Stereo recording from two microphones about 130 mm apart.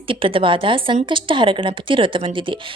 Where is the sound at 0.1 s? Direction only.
45° right (ahead or behind).